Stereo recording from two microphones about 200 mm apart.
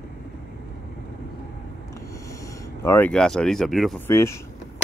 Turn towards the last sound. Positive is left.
turn(degrees=15)  # may be behind; listen again after turning